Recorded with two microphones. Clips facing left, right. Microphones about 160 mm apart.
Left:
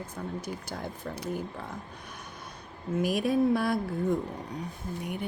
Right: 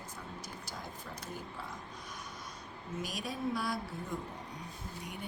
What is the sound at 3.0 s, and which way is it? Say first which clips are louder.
A woman's voice: left 14 dB; 60° left (ahead or behind).